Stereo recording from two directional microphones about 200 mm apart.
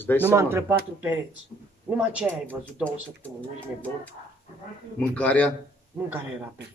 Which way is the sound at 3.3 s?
5° left (ahead or behind).